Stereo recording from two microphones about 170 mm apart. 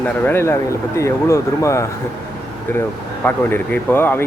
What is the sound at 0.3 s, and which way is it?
Speech, 15° left (ahead or behind).